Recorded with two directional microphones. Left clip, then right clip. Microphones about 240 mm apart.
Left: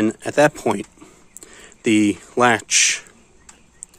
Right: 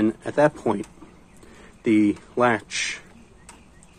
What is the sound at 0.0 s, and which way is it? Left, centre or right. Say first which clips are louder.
Speech: left 4 dB; left.